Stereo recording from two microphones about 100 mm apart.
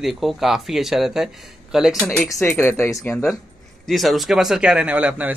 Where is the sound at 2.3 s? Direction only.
25° left (ahead or behind).